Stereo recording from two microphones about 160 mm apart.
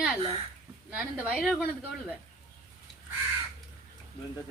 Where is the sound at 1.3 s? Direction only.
Centre (ahead or behind).